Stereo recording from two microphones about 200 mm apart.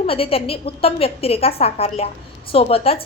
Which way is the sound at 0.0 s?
30° left (ahead or behind).